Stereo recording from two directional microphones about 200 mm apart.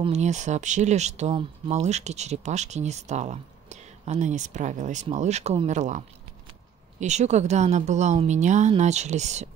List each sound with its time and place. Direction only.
0.0 s speech: 35° right (ahead or behind)